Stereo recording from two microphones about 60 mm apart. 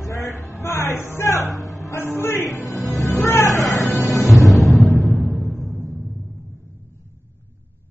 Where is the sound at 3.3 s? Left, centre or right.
Left.